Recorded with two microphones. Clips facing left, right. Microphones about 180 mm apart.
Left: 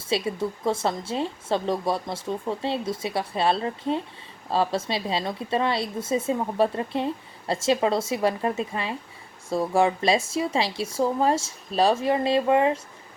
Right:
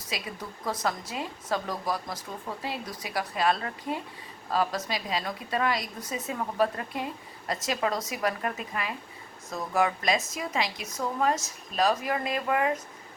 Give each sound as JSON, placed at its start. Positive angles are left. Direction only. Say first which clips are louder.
{"t": 0.1, "sound": "a woman's voice", "louder": "left 11 dB", "side_deg": 25}